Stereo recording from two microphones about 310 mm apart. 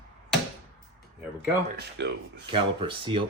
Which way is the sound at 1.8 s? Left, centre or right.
Right.